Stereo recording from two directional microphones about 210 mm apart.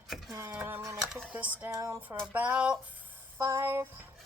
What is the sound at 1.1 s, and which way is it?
Speech, 5° right (ahead or behind).